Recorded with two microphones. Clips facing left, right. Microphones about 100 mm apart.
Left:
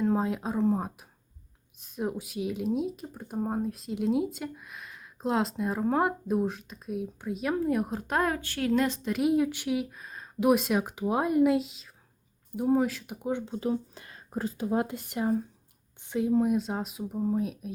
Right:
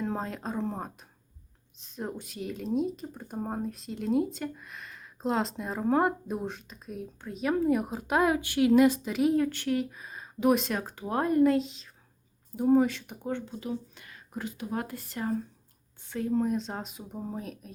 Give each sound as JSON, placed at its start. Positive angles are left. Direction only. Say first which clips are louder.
{"t": 0.0, "sound": "speech", "louder": "left 6 dB", "side_deg": 5}
{"t": 2.0, "sound": "speech", "louder": "left 4 dB", "side_deg": 5}
{"t": 9.3, "sound": "speech", "louder": "left 1 dB", "side_deg": 10}
{"t": 13.4, "sound": "speech", "louder": "left 5 dB", "side_deg": 30}